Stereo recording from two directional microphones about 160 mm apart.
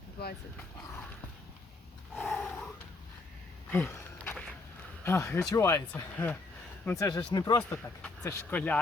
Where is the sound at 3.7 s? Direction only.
5° left (ahead or behind).